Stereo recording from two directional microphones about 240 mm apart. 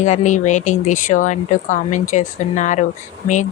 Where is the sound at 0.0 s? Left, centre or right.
Left.